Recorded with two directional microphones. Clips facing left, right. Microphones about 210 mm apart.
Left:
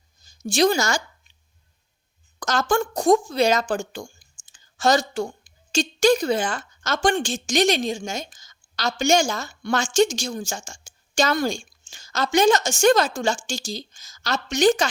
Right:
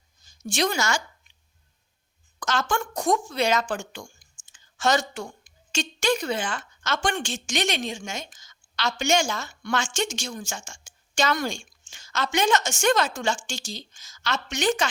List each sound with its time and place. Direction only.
0.4 s speech: 35° left (ahead or behind)
2.4 s a woman's voice: 40° left (ahead or behind)